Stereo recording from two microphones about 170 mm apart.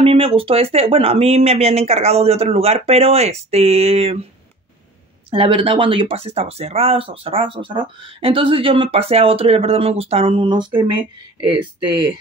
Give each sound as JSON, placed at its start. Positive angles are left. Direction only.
{"t": 0.0, "sound": "speech", "side_deg": -35}
{"t": 5.3, "sound": "speech", "side_deg": -30}